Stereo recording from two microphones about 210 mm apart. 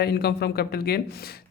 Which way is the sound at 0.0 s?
50° left (ahead or behind).